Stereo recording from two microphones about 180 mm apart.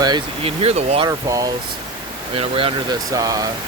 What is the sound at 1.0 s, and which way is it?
Speech, 20° right (ahead or behind).